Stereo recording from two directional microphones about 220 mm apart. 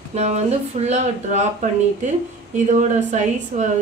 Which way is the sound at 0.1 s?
30° right (ahead or behind).